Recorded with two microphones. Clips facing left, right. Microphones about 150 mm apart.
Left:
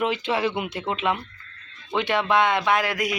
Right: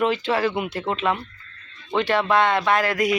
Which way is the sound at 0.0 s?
15° left (ahead or behind).